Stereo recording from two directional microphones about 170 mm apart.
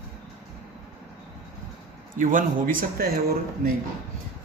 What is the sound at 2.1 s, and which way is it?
Speech, 50° right (ahead or behind).